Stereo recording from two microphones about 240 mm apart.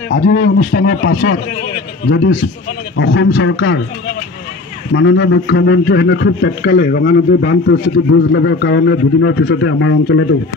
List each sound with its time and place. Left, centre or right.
0.1 s speech: left
4.9 s a man's voice: left